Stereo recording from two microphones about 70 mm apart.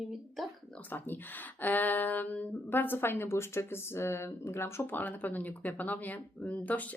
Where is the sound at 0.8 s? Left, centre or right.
Left.